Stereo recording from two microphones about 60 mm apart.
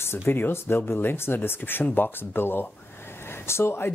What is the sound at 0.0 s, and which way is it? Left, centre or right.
Speech, left.